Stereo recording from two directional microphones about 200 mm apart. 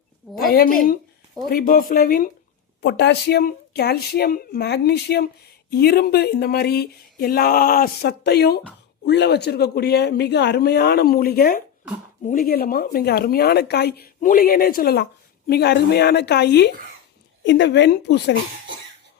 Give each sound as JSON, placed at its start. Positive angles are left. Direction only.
{"t": 0.3, "sound": "speech", "side_deg": 50}
{"t": 2.8, "sound": "speech", "side_deg": 60}